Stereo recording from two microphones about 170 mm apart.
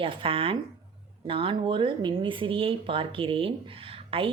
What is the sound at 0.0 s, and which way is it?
Speech, 30° right (ahead or behind).